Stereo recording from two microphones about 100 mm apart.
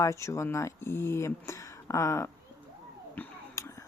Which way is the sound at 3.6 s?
30° left (ahead or behind).